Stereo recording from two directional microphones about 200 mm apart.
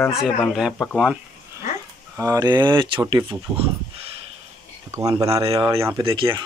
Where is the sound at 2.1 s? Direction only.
15° right (ahead or behind).